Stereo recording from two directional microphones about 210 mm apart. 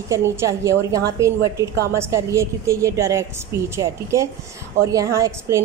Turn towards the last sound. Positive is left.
turn(degrees=-15)  # may be behind; listen again after turning